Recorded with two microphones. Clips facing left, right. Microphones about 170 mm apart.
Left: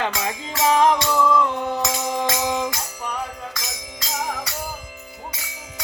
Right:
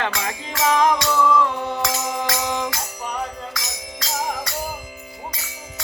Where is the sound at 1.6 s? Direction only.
20° left (ahead or behind).